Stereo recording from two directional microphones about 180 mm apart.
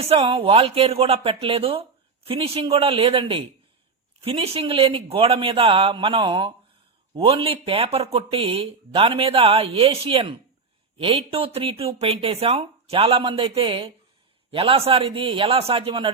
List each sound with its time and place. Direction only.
0.1 s a man's voice: 35° right (ahead or behind)